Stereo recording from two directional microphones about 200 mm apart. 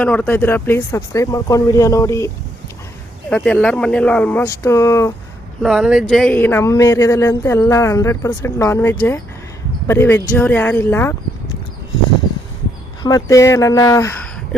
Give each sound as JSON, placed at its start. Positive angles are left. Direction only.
{"t": 0.0, "sound": "speech", "side_deg": 5}
{"t": 5.6, "sound": "speech", "side_deg": 0}
{"t": 13.0, "sound": "speech", "side_deg": 20}